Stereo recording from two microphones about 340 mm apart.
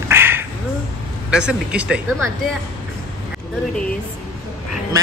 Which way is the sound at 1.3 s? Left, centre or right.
Centre.